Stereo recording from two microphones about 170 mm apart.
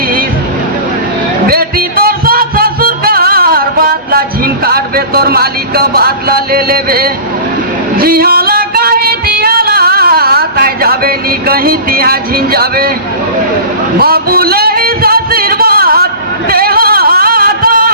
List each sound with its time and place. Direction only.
1.5 s music: 60° right (ahead or behind)
7.9 s female singing: 60° right (ahead or behind)
14.0 s a sound: 65° right (ahead or behind)